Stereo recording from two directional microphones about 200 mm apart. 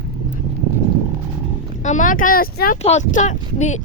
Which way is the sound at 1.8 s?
40° left (ahead or behind).